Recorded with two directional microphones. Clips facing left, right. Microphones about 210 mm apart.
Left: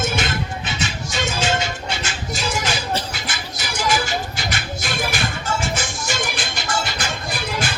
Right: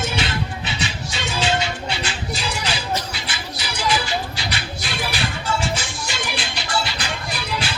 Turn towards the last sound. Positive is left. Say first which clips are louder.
# left 2 dB
turn(degrees=50)  # may be behind; listen again after turning